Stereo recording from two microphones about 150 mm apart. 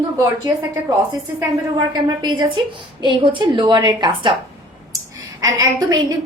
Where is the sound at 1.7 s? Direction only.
30° right (ahead or behind).